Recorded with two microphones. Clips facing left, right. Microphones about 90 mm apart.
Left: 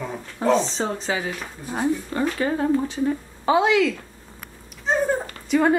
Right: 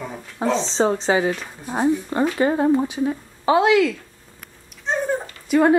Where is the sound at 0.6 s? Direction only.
25° right (ahead or behind).